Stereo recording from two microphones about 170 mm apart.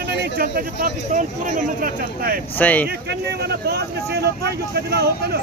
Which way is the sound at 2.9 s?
70° right (ahead or behind).